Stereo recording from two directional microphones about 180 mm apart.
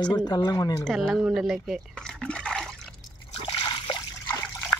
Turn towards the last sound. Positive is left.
turn(degrees=10)  # may be behind; listen again after turning